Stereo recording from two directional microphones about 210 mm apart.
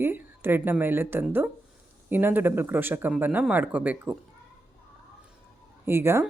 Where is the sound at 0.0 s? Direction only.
10° right (ahead or behind).